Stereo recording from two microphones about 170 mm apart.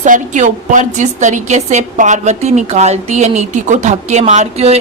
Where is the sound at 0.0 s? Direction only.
45° right (ahead or behind).